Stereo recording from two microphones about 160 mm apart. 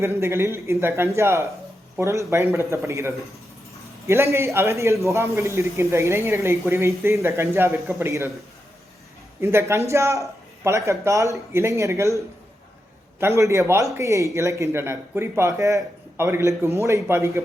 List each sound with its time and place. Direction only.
0.0 s a man's voice: 15° right (ahead or behind)
9.4 s a man's voice: 15° right (ahead or behind)